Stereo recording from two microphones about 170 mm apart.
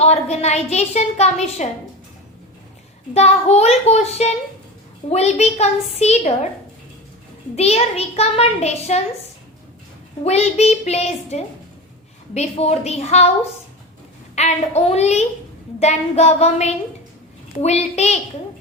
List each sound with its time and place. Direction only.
0.0 s a woman's voice: 40° left (ahead or behind)
3.2 s a woman's voice: 40° left (ahead or behind)
7.5 s a woman's voice: 40° left (ahead or behind)
10.2 s a woman's voice: 40° left (ahead or behind)
14.3 s a woman's voice: 40° left (ahead or behind)